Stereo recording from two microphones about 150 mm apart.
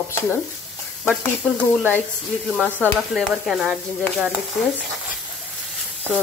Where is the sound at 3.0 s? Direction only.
Centre (ahead or behind).